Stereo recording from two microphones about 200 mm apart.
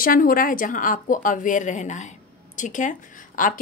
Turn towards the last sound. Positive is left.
turn(degrees=40)  # may be behind; listen again after turning